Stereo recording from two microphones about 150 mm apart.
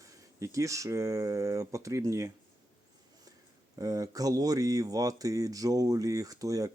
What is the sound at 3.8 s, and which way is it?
Speech, 25° right (ahead or behind).